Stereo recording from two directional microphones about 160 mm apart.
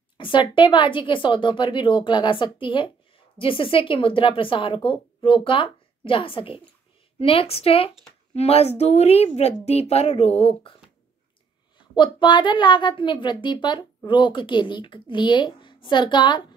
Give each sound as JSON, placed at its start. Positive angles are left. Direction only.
{"t": 0.2, "sound": "speech", "side_deg": 30}
{"t": 11.9, "sound": "speech", "side_deg": 30}